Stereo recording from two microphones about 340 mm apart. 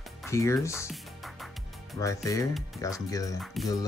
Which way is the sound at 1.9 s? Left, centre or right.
Centre.